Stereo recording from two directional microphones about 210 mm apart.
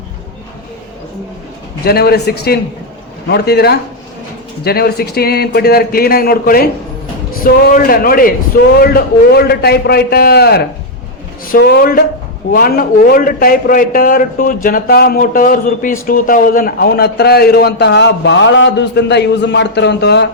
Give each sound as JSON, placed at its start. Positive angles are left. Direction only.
{"t": 1.8, "sound": "a man's voice", "side_deg": 50}